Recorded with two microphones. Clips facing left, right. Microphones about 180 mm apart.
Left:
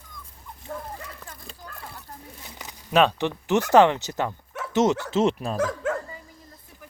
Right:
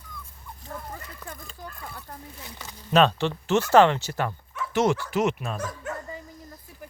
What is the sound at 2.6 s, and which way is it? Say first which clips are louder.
Speech: even; 15° left (ahead or behind).